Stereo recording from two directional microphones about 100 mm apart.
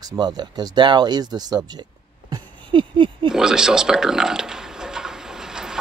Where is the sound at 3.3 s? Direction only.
5° right (ahead or behind).